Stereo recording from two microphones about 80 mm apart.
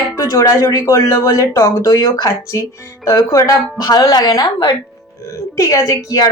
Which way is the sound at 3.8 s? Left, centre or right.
Left.